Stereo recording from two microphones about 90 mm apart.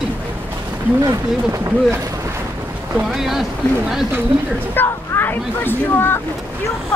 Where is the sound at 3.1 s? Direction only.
5° right (ahead or behind).